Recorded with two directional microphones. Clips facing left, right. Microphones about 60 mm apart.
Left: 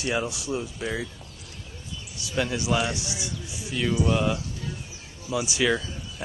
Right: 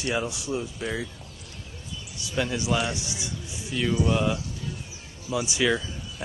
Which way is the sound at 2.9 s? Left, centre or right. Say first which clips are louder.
Left 1 dB; right.